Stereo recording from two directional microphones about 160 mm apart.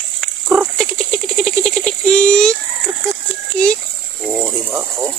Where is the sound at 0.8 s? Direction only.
5° left (ahead or behind).